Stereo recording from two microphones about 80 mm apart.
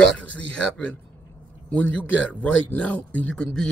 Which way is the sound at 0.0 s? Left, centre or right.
Centre.